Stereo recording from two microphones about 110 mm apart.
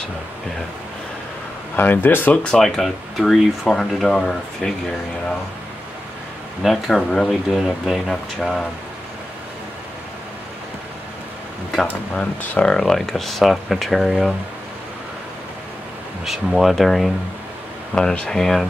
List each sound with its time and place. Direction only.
1.8 s speech: 20° left (ahead or behind)
2.5 s speech: 5° left (ahead or behind)
6.6 s speech: centre (ahead or behind)
11.7 s speech: 10° left (ahead or behind)
16.3 s speech: centre (ahead or behind)